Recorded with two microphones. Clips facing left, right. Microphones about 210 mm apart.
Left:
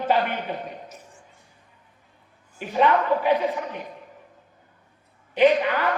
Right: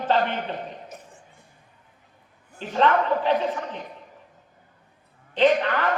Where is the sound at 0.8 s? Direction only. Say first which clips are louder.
Right 2 dB; 55° right (ahead or behind).